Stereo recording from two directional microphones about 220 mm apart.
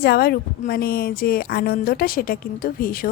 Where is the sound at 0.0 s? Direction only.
45° left (ahead or behind).